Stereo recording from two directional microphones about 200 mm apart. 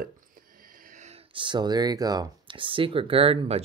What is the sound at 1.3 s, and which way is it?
Speech, 25° right (ahead or behind).